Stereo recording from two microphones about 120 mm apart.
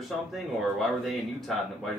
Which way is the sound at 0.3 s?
Centre (ahead or behind).